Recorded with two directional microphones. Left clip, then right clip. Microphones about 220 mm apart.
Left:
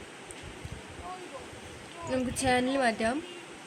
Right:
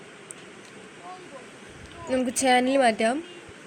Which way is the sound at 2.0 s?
15° right (ahead or behind).